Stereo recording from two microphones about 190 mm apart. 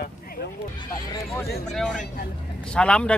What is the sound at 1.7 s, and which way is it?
Speech, 5° left (ahead or behind).